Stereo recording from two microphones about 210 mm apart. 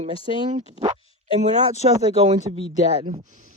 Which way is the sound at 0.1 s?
25° left (ahead or behind).